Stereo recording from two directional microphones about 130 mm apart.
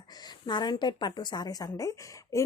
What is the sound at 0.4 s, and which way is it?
A woman's voice, 35° left (ahead or behind).